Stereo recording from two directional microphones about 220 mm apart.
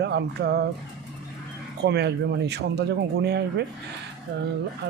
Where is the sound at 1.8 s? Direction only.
50° right (ahead or behind).